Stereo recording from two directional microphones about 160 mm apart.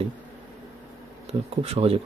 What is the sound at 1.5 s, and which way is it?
Speech, 40° right (ahead or behind).